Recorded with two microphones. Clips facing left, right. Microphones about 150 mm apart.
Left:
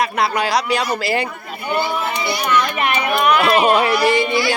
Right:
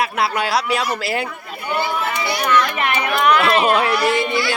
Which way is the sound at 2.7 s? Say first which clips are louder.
Left 1 dB; 15° left (ahead or behind).